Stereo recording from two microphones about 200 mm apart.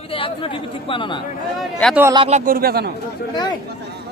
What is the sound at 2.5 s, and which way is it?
Speech, 50° right (ahead or behind).